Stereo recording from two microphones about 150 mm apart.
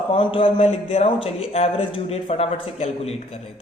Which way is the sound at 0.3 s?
40° left (ahead or behind).